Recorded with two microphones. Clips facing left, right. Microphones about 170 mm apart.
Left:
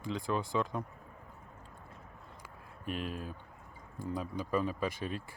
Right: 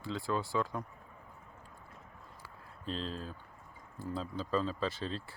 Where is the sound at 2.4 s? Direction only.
15° left (ahead or behind).